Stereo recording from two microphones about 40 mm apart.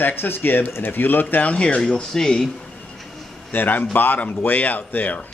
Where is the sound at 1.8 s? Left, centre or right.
Centre.